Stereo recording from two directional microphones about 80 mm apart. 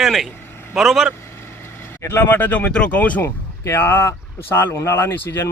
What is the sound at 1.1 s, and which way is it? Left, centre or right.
Vehicle, left.